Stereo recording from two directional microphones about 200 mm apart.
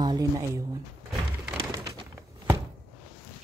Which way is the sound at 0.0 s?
20° right (ahead or behind).